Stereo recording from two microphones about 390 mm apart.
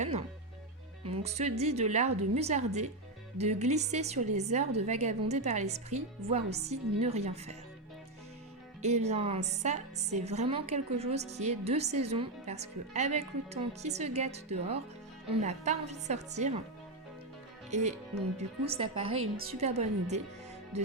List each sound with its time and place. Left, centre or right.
0.0 s a woman's voice: centre
8.8 s a woman's voice: centre
17.7 s a woman's voice: centre